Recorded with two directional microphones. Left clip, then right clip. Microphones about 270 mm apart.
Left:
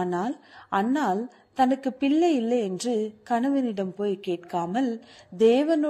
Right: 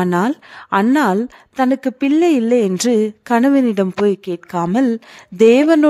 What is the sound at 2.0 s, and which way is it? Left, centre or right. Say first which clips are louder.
Speech: right 8 dB; right.